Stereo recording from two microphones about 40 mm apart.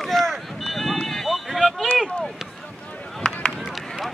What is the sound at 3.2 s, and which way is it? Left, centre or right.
Run, left.